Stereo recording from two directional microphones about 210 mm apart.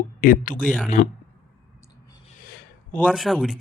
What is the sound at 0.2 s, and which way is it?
Speech, 40° left (ahead or behind).